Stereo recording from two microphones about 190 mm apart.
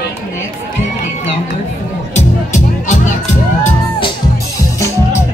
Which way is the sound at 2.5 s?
40° left (ahead or behind).